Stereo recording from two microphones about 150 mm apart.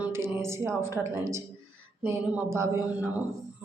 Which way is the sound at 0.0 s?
15° right (ahead or behind).